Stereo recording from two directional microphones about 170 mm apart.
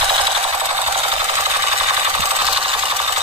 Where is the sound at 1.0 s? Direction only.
35° right (ahead or behind).